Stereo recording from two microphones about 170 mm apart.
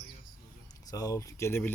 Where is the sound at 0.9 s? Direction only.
20° left (ahead or behind).